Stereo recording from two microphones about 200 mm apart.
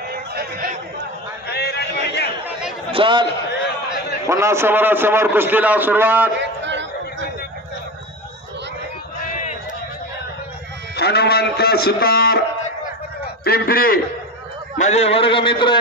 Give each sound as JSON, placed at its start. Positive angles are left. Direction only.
{"t": 0.1, "sound": "chatter", "side_deg": -50}
{"t": 1.5, "sound": "speech", "side_deg": 55}
{"t": 2.9, "sound": "a man's voice", "side_deg": -25}
{"t": 4.3, "sound": "a man's voice", "side_deg": -15}
{"t": 6.4, "sound": "a sound", "side_deg": -65}
{"t": 11.0, "sound": "a man's voice", "side_deg": 55}
{"t": 13.4, "sound": "a man's voice", "side_deg": 50}
{"t": 14.8, "sound": "a sound", "side_deg": 35}